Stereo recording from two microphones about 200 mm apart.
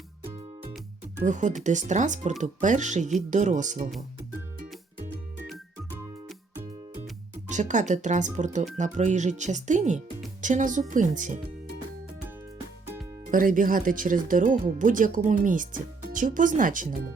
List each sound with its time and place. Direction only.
1.2 s speech: 40° right (ahead or behind)
7.4 s speech: 40° right (ahead or behind)
13.2 s speech: 40° right (ahead or behind)